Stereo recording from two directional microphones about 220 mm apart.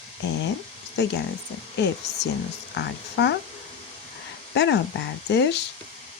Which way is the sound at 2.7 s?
50° left (ahead or behind).